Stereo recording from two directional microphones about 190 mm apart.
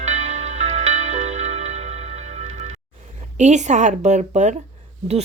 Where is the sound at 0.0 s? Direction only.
35° right (ahead or behind).